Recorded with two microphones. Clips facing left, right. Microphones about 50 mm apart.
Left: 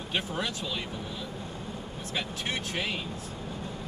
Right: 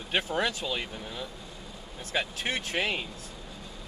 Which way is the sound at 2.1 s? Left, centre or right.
Right.